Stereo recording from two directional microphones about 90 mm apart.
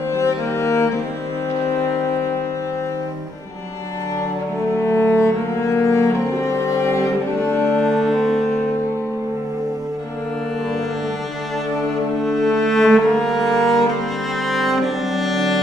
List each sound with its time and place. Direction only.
0.1 s music: 30° left (ahead or behind)
4.8 s cello: 25° left (ahead or behind)
7.8 s music: centre (ahead or behind)
12.3 s music: centre (ahead or behind)